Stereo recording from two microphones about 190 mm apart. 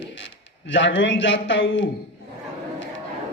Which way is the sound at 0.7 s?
70° left (ahead or behind).